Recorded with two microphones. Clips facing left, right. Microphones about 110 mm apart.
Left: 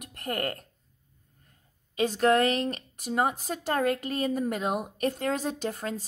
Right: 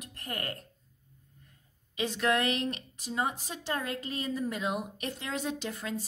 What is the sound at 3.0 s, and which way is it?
A woman's voice, 55° left (ahead or behind).